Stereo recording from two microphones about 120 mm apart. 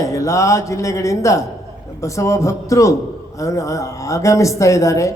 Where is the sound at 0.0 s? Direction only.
25° left (ahead or behind).